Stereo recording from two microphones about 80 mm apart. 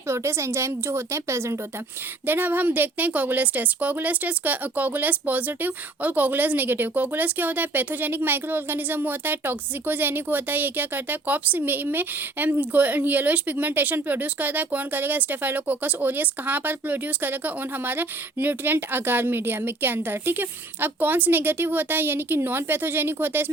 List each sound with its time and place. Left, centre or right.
0.1 s a woman's voice: right
2.2 s a woman's voice: right